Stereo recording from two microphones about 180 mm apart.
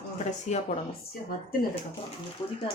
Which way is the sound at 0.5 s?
40° left (ahead or behind).